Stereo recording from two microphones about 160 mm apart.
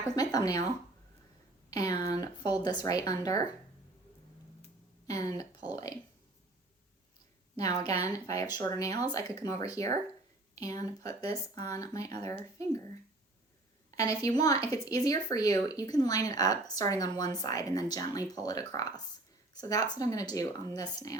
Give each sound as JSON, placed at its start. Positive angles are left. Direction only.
{"t": 0.2, "sound": "speech", "side_deg": 25}
{"t": 1.7, "sound": "speech", "side_deg": 25}
{"t": 5.0, "sound": "speech", "side_deg": 20}
{"t": 7.5, "sound": "a woman's voice", "side_deg": 25}
{"t": 13.9, "sound": "speech", "side_deg": 20}